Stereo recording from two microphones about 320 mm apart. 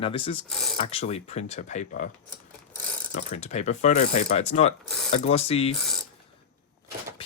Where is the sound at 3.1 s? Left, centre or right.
Left.